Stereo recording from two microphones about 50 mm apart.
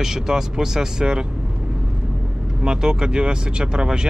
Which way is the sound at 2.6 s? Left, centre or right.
Centre.